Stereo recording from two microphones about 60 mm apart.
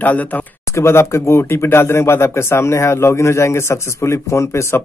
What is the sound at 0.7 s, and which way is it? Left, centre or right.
Speech, left.